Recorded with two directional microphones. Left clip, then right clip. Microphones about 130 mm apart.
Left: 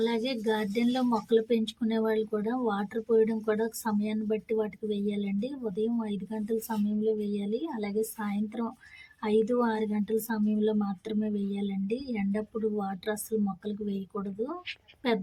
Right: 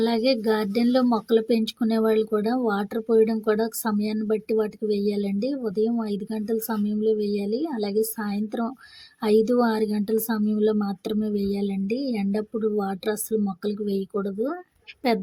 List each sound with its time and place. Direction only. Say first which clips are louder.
0.0 s speech: right 7 dB; 45° right (ahead or behind)